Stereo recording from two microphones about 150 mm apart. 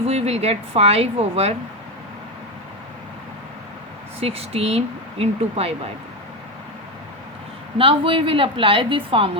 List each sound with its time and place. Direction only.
0.0 s speech: 45° right (ahead or behind)
4.2 s speech: 40° right (ahead or behind)
7.8 s a woman's voice: 35° right (ahead or behind)